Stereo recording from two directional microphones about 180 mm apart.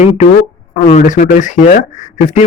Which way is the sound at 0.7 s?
40° left (ahead or behind).